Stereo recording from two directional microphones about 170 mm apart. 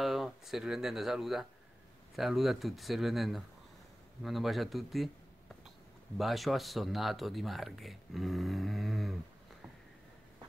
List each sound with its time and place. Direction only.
0.0 s speech: centre (ahead or behind)
6.1 s speech: centre (ahead or behind)